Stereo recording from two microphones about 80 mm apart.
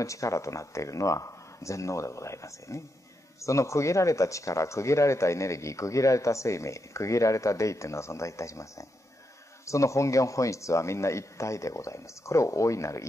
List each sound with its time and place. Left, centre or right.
0.0 s speech: left